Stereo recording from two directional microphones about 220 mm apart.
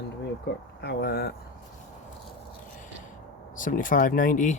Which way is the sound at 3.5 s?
40° left (ahead or behind).